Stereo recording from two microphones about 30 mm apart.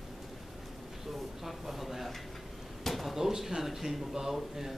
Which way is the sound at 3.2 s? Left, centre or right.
Centre.